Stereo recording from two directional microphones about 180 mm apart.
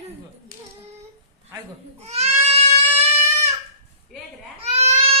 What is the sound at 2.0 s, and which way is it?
Goat, 35° right (ahead or behind).